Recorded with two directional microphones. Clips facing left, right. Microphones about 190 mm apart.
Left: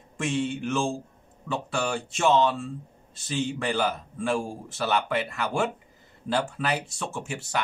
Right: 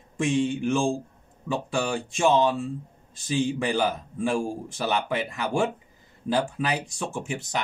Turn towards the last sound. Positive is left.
turn(degrees=-20)  # may be behind; listen again after turning